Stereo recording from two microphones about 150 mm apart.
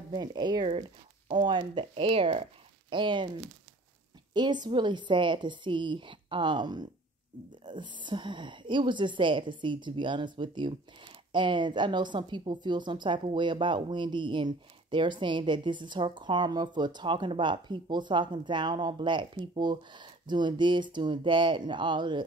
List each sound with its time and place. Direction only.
0.1 s a woman's voice: 30° right (ahead or behind)
4.3 s a woman's voice: 30° right (ahead or behind)